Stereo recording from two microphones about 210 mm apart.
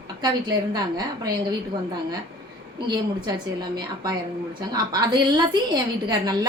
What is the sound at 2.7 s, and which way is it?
Speech, 20° right (ahead or behind).